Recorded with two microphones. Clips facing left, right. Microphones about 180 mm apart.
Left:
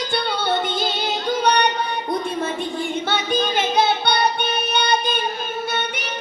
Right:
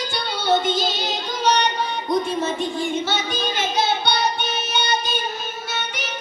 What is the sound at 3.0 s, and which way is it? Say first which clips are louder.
Music: left 3 dB; 60° left (ahead or behind).